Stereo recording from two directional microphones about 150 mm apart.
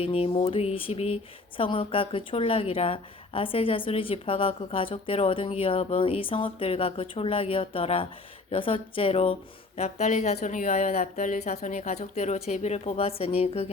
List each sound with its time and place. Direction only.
0.0 s speech: 35° left (ahead or behind)
9.7 s a woman's voice: 50° left (ahead or behind)